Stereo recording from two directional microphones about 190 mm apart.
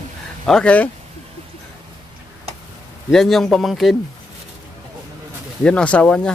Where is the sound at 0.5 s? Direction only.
5° left (ahead or behind).